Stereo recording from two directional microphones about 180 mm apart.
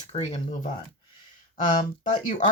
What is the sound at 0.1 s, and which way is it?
Speech, 35° left (ahead or behind).